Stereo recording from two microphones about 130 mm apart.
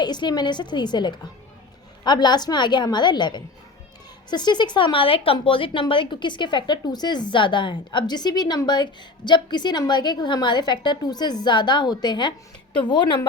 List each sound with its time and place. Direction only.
0.0 s a woman's voice: 35° left (ahead or behind)